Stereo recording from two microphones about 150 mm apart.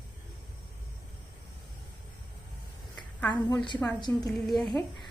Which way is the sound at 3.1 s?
10° left (ahead or behind).